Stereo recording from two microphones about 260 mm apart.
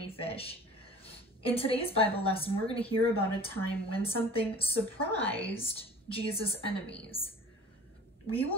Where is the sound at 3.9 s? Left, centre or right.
Left.